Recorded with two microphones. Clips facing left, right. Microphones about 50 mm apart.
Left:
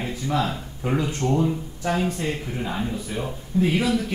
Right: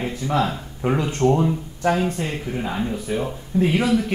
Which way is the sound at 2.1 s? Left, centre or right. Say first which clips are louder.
Right 1 dB; centre.